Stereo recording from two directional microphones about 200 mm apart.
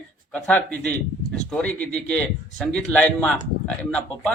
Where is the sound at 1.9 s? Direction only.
5° left (ahead or behind).